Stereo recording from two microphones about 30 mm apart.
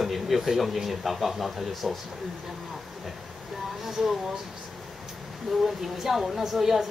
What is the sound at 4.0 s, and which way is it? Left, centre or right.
Speech, centre.